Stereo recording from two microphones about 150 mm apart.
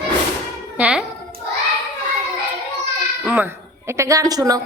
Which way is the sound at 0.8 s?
5° right (ahead or behind).